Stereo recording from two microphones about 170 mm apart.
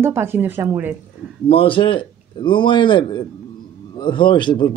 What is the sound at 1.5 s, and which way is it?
A man's voice, 30° left (ahead or behind).